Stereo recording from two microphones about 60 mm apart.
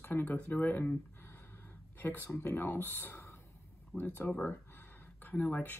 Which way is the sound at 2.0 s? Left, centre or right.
Left.